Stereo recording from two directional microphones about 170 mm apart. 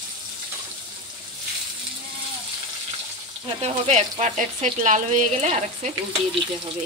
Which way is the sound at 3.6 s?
40° right (ahead or behind).